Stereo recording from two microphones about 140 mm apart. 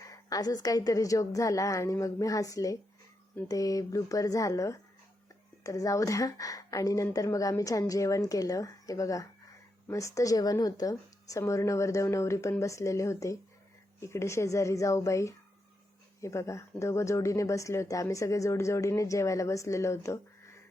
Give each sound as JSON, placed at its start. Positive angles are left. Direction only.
{"t": 0.0, "sound": "speech", "side_deg": 25}